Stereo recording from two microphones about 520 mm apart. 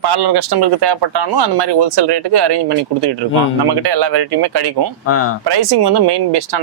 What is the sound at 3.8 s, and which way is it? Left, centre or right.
Speech, right.